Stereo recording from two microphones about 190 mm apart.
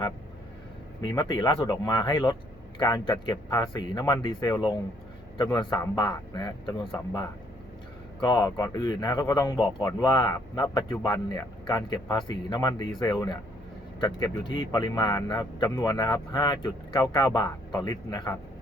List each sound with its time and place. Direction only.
1.1 s speech: 20° left (ahead or behind)